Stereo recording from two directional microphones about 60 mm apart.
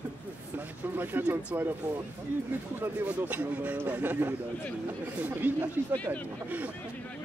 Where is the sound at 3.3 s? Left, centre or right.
Right.